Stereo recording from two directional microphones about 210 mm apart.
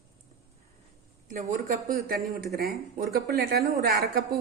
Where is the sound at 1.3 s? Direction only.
40° right (ahead or behind).